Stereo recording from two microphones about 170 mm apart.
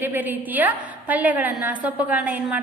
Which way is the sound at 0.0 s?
10° right (ahead or behind).